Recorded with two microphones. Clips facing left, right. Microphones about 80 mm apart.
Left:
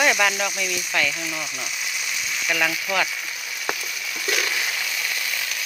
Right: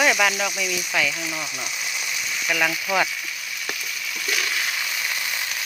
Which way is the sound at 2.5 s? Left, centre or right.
Centre.